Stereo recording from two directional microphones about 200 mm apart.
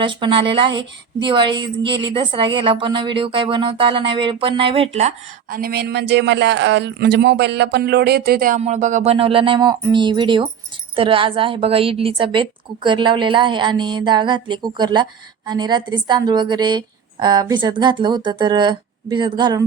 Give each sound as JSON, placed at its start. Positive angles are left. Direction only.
{"t": 0.0, "sound": "a woman's voice", "side_deg": -25}
{"t": 5.5, "sound": "a woman's voice", "side_deg": -45}